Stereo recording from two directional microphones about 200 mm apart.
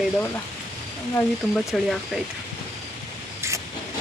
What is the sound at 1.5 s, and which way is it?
Speech, centre (ahead or behind).